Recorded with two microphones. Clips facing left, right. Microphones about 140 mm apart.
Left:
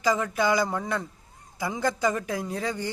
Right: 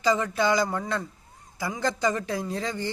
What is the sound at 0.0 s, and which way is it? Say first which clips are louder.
Speech: right 1 dB; 10° left (ahead or behind).